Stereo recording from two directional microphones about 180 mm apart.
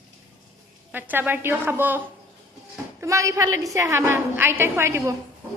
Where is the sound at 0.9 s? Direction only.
10° right (ahead or behind).